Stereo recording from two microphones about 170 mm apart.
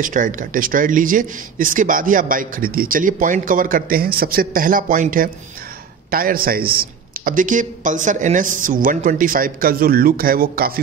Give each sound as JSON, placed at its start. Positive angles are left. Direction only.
{"t": 0.0, "sound": "a man's voice", "side_deg": -50}